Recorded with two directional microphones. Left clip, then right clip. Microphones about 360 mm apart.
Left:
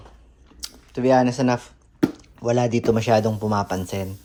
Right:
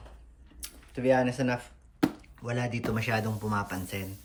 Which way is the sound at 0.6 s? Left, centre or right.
Centre.